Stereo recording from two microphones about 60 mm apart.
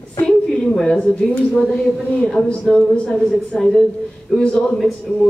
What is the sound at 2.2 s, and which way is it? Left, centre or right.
A man's voice, centre.